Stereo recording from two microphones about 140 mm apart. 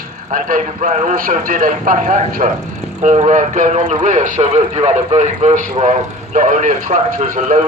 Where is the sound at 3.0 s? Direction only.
55° right (ahead or behind).